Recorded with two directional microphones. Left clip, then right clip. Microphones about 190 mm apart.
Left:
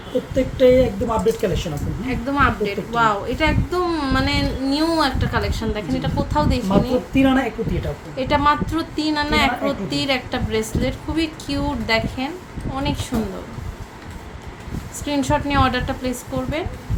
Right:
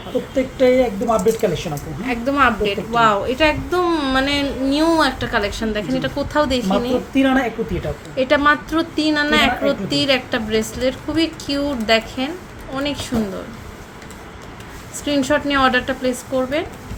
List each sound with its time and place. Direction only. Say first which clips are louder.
0.3 s speech: left 1 dB; 5° left (ahead or behind)
2.0 s a woman's voice: right 3 dB; 25° right (ahead or behind)
7.1 s a woman's voice: right 1 dB; 5° left (ahead or behind)
8.1 s a woman's voice: right 3 dB; 15° right (ahead or behind)
15.0 s a woman's voice: right 3 dB; 15° right (ahead or behind)